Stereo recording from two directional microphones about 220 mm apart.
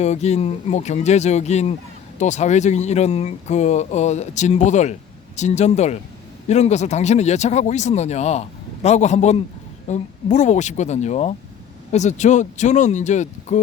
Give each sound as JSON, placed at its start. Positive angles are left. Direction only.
{"t": 0.0, "sound": "speech", "side_deg": 30}